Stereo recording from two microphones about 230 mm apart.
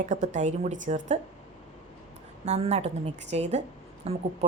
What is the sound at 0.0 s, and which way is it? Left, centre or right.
A woman's voice, right.